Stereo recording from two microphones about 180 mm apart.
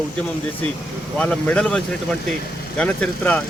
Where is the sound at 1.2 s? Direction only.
5° left (ahead or behind).